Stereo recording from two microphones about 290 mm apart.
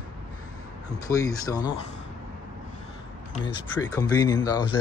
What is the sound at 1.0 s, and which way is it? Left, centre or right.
Speech, centre.